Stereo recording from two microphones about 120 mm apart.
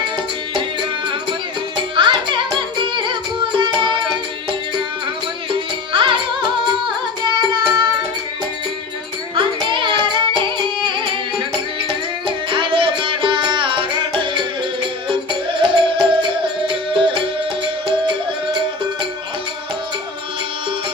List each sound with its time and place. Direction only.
1.0 s music: 45° right (ahead or behind)
5.5 s music: 45° right (ahead or behind)
9.3 s music: 45° right (ahead or behind)
15.3 s music: 45° right (ahead or behind)